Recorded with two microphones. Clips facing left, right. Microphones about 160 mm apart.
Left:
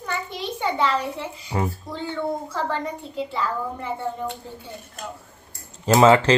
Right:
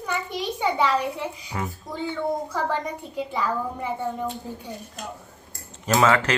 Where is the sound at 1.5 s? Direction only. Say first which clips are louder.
Left 6 dB; 30° left (ahead or behind).